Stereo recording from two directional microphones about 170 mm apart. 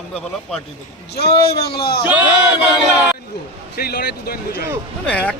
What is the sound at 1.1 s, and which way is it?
Speech, 70° left (ahead or behind).